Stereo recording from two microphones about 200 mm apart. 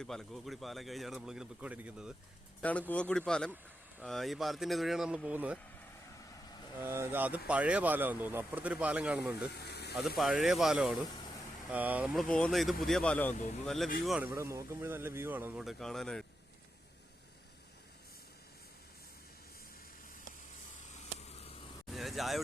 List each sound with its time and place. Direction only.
0.0 s speech: centre (ahead or behind)
2.6 s speech: 5° left (ahead or behind)
6.7 s speech: 10° right (ahead or behind)
9.5 s speech: 55° left (ahead or behind)
10.2 s speech: centre (ahead or behind)
21.2 s a sound: 30° left (ahead or behind)
21.8 s speech: centre (ahead or behind)